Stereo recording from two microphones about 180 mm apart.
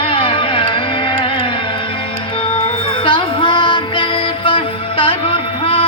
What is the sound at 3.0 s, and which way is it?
Music, 25° left (ahead or behind).